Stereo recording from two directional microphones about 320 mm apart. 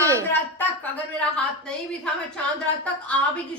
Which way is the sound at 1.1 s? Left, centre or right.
Centre.